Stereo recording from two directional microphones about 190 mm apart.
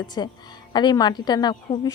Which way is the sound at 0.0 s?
25° left (ahead or behind).